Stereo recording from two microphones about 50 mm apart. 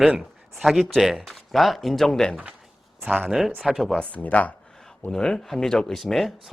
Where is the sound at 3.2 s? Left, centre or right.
Centre.